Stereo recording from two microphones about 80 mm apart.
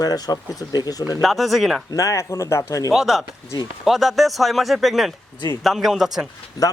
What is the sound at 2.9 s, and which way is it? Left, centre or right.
Speech, centre.